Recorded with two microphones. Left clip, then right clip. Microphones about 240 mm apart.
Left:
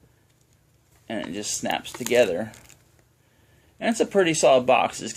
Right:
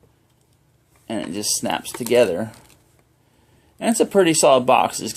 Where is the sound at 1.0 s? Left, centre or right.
Right.